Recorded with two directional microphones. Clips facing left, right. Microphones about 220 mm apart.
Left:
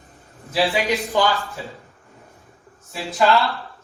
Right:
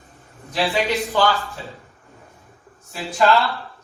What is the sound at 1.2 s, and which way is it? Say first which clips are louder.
Speech: right 1 dB; 15° left (ahead or behind).